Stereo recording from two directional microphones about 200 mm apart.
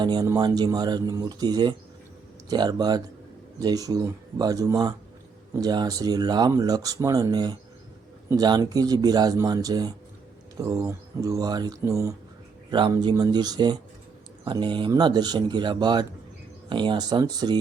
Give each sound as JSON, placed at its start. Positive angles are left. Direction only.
{"t": 0.0, "sound": "speech", "side_deg": -20}